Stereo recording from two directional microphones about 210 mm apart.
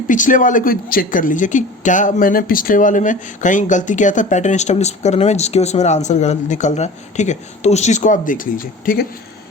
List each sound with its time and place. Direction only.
0.1 s speech: 40° left (ahead or behind)